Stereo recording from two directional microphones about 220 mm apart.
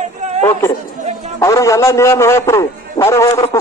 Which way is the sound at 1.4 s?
15° left (ahead or behind).